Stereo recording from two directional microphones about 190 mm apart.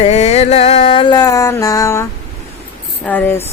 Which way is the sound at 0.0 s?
35° left (ahead or behind).